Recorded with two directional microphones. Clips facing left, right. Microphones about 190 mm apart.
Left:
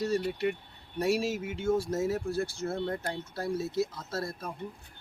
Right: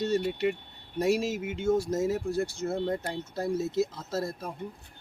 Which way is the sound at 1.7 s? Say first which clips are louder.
Right 2 dB; 20° right (ahead or behind).